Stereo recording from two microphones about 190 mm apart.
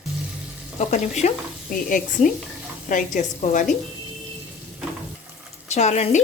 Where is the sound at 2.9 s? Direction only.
40° left (ahead or behind).